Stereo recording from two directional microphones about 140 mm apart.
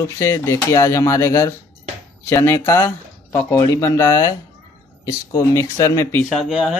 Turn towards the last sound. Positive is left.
turn(degrees=0)  # may be behind; listen again after turning